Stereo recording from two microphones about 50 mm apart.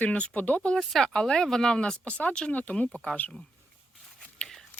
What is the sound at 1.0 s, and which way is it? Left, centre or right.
Speech, centre.